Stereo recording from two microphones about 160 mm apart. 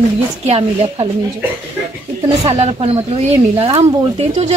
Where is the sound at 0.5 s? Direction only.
40° right (ahead or behind).